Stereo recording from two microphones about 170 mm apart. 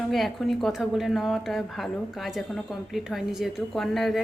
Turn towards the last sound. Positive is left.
turn(degrees=0)  # may be behind; listen again after turning